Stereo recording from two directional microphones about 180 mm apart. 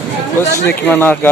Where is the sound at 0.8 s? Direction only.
10° left (ahead or behind).